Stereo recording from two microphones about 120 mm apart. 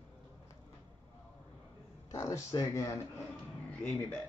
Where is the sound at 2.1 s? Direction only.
25° left (ahead or behind).